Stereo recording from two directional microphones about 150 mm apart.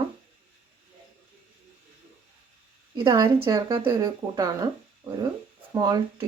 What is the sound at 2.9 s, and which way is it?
A woman's voice, 30° right (ahead or behind).